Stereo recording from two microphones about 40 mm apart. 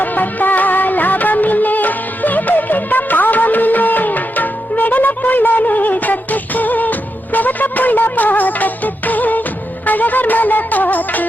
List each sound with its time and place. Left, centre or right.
0.0 s music of bollywood: left
7.3 s music: left